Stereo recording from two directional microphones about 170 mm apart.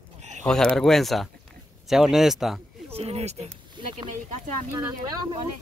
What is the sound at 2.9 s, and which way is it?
Speech, 35° right (ahead or behind).